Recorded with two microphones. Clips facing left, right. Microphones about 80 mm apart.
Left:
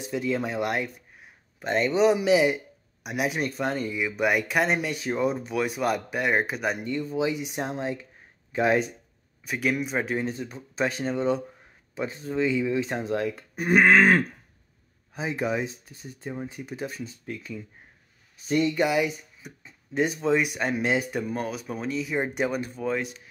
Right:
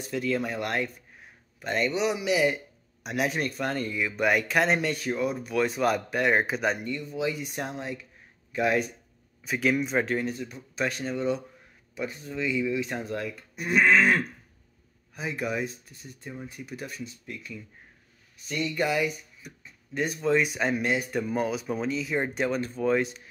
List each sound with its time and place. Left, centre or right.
0.0 s speech: centre
2.0 s speech: left
2.4 s speech: centre
4.9 s speech: left
5.6 s speech: centre
6.8 s speech: left
9.4 s speech: centre
10.2 s speech: left
13.6 s a sound: left
15.1 s speech: left
18.8 s speech: centre
21.3 s speech: centre
22.8 s speech: centre